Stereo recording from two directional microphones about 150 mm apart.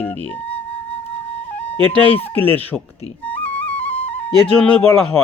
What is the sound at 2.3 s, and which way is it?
Speech, 10° left (ahead or behind).